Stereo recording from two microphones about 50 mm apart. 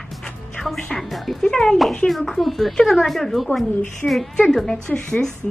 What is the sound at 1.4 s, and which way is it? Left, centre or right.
Speech, centre.